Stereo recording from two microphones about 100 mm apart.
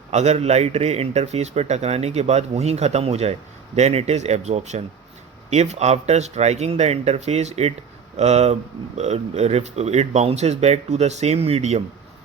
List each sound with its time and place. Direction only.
0.3 s speech: 90° right